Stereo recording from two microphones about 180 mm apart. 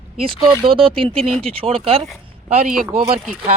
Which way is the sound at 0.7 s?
30° right (ahead or behind).